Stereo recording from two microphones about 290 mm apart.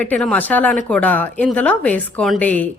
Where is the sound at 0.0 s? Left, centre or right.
Centre.